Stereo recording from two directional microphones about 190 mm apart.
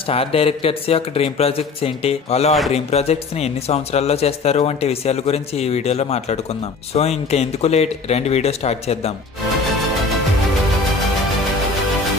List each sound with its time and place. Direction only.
0.1 s speech: 30° left (ahead or behind)